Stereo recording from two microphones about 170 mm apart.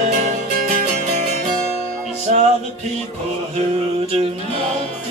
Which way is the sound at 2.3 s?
45° right (ahead or behind).